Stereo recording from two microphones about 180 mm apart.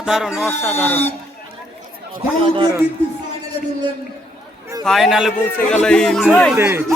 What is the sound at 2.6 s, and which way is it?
Speech, 20° right (ahead or behind).